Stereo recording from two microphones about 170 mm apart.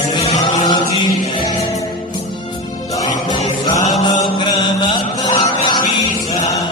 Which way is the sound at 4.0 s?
25° left (ahead or behind).